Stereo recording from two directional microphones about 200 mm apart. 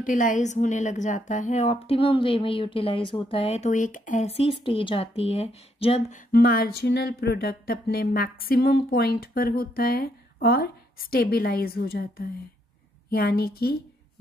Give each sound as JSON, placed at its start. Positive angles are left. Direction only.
{"t": 0.0, "sound": "a woman's voice", "side_deg": 40}